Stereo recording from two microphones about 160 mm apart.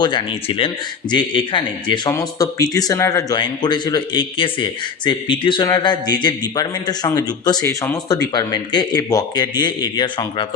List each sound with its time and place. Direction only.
0.0 s a man's voice: 30° left (ahead or behind)